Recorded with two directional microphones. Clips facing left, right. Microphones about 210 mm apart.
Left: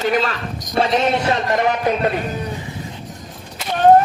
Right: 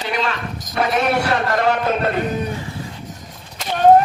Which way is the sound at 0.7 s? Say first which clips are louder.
Left 1 dB; 25° left (ahead or behind).